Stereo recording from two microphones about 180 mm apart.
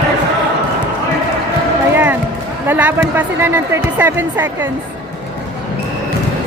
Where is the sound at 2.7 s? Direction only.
10° right (ahead or behind).